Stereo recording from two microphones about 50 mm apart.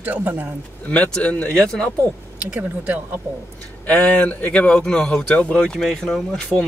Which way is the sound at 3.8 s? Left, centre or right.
Left.